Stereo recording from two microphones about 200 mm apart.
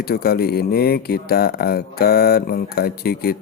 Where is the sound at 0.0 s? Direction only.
50° left (ahead or behind).